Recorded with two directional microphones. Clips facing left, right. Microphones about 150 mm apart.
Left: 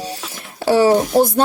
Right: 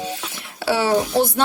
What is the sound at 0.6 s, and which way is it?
Speech, 45° left (ahead or behind).